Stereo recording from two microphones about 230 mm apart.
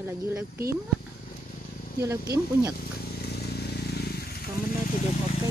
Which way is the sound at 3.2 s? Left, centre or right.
Left.